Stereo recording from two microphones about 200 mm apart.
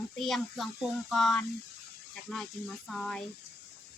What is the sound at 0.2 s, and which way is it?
A child's voice, centre (ahead or behind).